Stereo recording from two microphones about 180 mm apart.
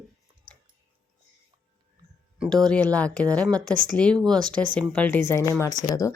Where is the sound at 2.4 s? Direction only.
5° left (ahead or behind).